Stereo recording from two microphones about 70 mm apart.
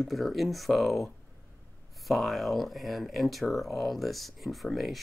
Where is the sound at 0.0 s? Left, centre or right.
Centre.